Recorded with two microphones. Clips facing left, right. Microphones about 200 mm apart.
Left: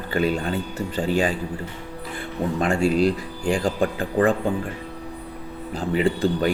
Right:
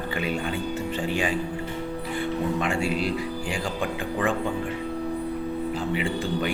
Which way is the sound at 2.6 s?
40° left (ahead or behind).